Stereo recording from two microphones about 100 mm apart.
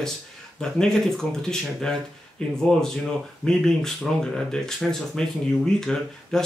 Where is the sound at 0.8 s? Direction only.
5° left (ahead or behind).